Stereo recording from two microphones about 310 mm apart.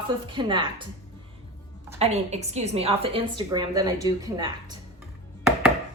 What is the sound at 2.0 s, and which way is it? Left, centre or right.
A woman's voice, right.